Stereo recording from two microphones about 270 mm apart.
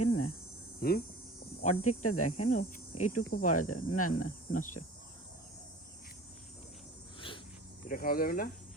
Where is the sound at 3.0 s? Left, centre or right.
Left.